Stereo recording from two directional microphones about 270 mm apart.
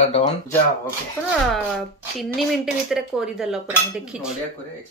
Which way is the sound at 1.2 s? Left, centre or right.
Centre.